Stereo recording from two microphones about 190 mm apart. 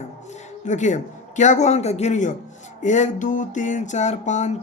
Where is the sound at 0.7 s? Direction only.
40° left (ahead or behind).